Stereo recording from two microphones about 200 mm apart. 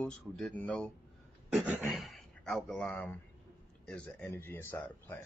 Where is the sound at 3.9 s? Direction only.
10° left (ahead or behind).